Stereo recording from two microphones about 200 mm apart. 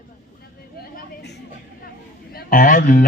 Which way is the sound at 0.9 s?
50° left (ahead or behind).